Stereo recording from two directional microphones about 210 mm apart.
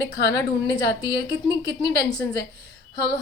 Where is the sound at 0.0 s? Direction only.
20° left (ahead or behind).